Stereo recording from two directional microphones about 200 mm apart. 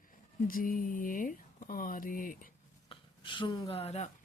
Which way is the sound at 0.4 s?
45° left (ahead or behind).